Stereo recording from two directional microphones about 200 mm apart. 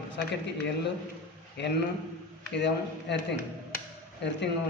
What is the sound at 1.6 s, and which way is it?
A man's voice, 60° left (ahead or behind).